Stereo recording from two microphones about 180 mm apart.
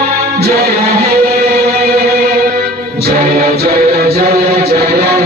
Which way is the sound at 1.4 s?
55° right (ahead or behind).